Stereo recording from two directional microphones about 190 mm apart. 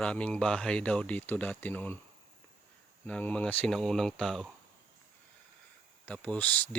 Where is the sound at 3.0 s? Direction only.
5° left (ahead or behind).